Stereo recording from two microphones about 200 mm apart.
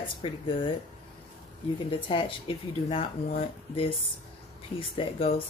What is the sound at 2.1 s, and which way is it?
Speech, 25° left (ahead or behind).